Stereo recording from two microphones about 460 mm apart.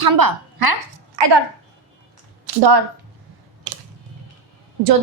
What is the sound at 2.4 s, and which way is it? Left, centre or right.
Speech, right.